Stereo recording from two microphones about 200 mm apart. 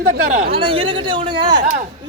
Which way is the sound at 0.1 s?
40° right (ahead or behind).